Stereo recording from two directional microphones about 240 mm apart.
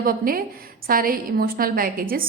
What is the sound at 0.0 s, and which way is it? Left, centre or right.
A woman's voice, right.